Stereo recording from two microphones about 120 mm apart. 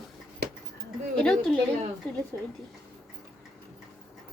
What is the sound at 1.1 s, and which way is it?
Speech, 5° left (ahead or behind).